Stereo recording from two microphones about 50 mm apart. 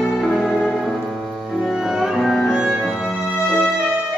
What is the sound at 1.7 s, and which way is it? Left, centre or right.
Music, centre.